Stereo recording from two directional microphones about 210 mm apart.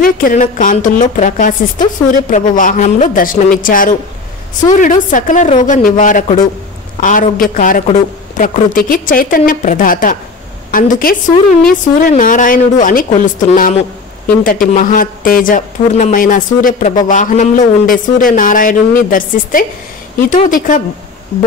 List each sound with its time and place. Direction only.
0.0 s a woman's voice: 40° left (ahead or behind)